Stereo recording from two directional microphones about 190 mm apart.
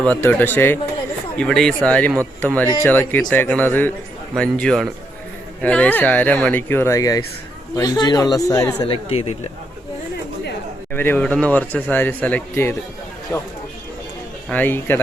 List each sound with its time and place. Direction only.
0.0 s speech: 10° left (ahead or behind)
8.9 s speech: 30° left (ahead or behind)
10.9 s speech: 10° left (ahead or behind)
14.5 s speech: 10° left (ahead or behind)